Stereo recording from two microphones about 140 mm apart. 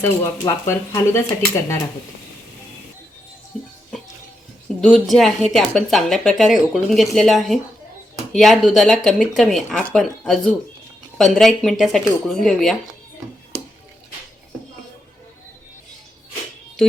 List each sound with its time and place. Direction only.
0.0 s speech: 20° left (ahead or behind)
3.5 s a woman's voice: 5° left (ahead or behind)
4.8 s a woman's voice: centre (ahead or behind)